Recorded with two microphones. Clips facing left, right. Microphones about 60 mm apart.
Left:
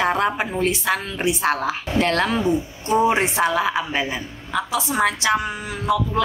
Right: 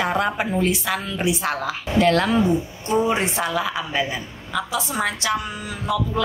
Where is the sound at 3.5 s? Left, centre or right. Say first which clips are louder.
Left 2 dB; left.